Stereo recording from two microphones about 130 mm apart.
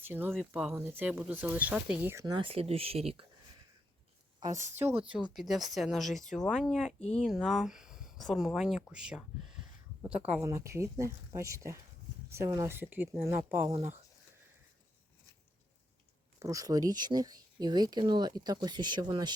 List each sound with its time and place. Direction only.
0.0 s speech: 15° right (ahead or behind)
2.2 s speech: 40° right (ahead or behind)
4.4 s a sound: 30° right (ahead or behind)
4.8 s speech: 15° right (ahead or behind)
10.4 s speech: 20° right (ahead or behind)
16.4 s speech: 25° right (ahead or behind)